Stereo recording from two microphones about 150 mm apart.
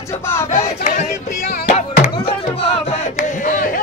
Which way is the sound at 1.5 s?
50° left (ahead or behind).